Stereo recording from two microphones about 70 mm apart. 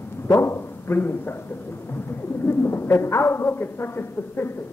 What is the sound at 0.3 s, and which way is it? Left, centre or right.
Speech, left.